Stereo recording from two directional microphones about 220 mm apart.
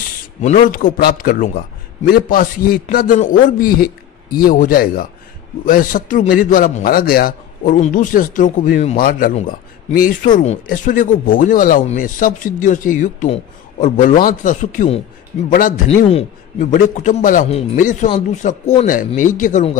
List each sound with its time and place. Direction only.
0.4 s a man's voice: 35° left (ahead or behind)